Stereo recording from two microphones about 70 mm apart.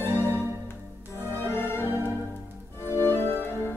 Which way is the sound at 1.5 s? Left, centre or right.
Left.